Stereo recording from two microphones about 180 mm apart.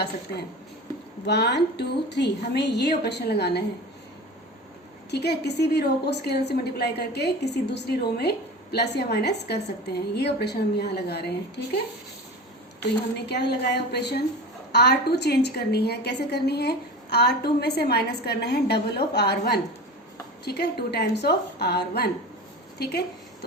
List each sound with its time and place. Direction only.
1.3 s a woman's voice: 70° left (ahead or behind)
5.1 s a woman's voice: 65° left (ahead or behind)
13.1 s a woman's voice: 65° left (ahead or behind)